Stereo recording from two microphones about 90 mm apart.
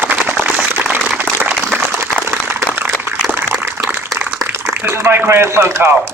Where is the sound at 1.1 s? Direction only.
15° right (ahead or behind).